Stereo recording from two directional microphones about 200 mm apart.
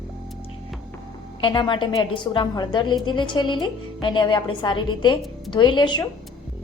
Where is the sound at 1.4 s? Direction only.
25° left (ahead or behind).